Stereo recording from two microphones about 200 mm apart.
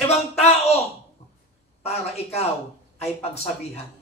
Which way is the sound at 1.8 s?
30° left (ahead or behind).